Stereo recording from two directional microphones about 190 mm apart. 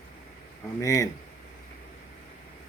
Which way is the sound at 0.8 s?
15° left (ahead or behind).